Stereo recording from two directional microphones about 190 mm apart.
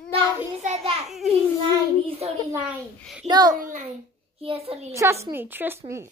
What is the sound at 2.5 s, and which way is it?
Speech, 5° right (ahead or behind).